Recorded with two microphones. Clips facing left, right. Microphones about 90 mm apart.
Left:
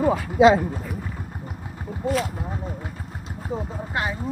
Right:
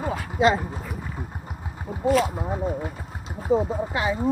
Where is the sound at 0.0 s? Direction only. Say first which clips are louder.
Left 6 dB; 20° right (ahead or behind).